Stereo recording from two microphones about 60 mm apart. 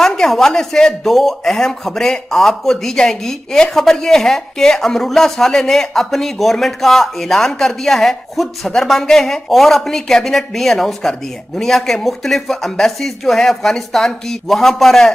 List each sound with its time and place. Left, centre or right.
0.0 s speech: centre